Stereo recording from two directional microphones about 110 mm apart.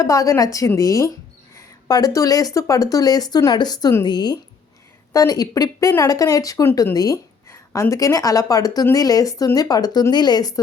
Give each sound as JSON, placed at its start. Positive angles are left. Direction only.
{"t": 0.0, "sound": "speech", "side_deg": 30}